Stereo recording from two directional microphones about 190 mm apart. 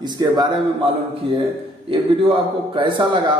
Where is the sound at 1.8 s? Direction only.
25° right (ahead or behind).